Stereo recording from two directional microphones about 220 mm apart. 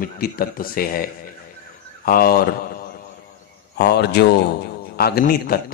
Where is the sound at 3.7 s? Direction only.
50° left (ahead or behind).